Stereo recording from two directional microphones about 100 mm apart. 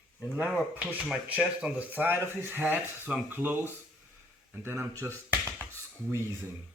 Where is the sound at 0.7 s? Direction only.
10° right (ahead or behind).